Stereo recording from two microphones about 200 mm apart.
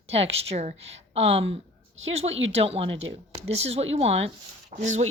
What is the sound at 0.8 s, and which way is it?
Speech, 65° right (ahead or behind).